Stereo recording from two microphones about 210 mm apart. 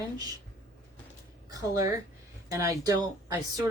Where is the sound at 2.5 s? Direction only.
15° right (ahead or behind).